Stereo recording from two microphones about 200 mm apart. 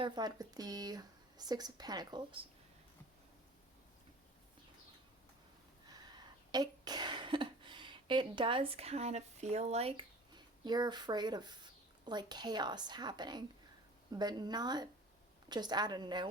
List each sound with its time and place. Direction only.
0.0 s speech: 20° right (ahead or behind)
5.9 s speech: 20° right (ahead or behind)